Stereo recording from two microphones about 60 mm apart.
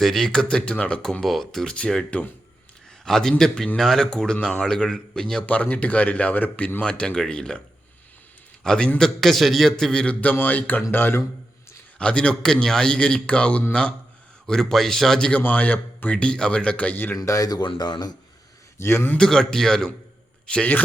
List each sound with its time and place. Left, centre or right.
0.0 s a man's voice: centre
0.6 s a man's voice: left
1.2 s a man's voice: centre
2.0 s a man's voice: left
3.0 s a man's voice: centre; by 6.8 s left
6.8 s a man's voice: centre
8.6 s a man's voice: centre
10.2 s speech: left
11.9 s a man's voice: centre
14.4 s a man's voice: centre
15.3 s a man's voice: left
17.2 s speech: left
18.8 s a man's voice: left
19.1 s a man's voice: centre